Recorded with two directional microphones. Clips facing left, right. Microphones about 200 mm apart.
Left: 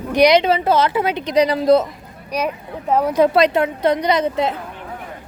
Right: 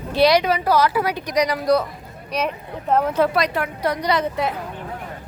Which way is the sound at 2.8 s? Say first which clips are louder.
Left 3 dB; 10° left (ahead or behind).